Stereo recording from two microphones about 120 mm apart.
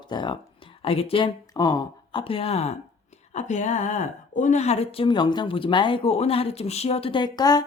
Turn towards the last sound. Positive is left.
turn(degrees=35)  # may be behind; listen again after turning